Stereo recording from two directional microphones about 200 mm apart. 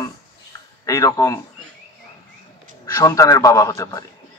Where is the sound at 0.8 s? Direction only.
15° left (ahead or behind).